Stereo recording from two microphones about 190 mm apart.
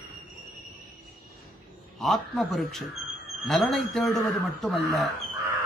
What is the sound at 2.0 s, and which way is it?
A man's voice, centre (ahead or behind).